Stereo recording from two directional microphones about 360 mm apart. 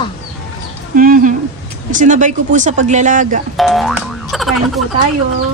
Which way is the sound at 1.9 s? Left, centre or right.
Right.